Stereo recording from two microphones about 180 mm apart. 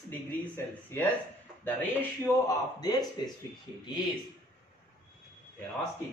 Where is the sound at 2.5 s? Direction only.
20° left (ahead or behind).